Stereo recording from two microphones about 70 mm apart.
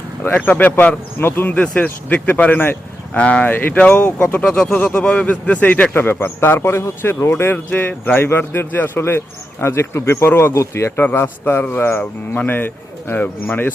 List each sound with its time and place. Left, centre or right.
0.2 s speech: left
1.5 s speech: centre
3.2 s speech: centre
4.4 s speech: centre
4.7 s speech: left
7.5 s speech: left
10.5 s speech: left